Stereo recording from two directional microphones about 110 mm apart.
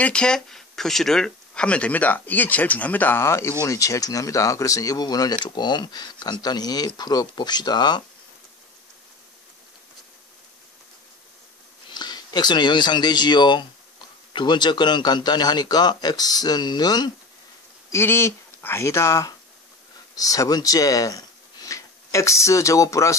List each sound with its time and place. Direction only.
0.0 s speech: 10° left (ahead or behind); by 8.0 s 40° left (ahead or behind)
11.9 s speech: 40° left (ahead or behind)
17.9 s speech: 25° left (ahead or behind)